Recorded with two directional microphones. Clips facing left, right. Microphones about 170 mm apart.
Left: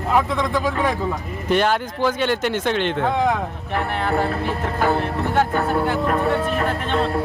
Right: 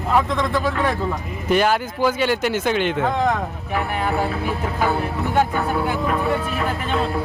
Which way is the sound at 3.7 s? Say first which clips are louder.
Left 1 dB; 5° right (ahead or behind).